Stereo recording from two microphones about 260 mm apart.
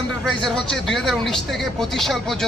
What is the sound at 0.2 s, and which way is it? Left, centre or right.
Speech, centre.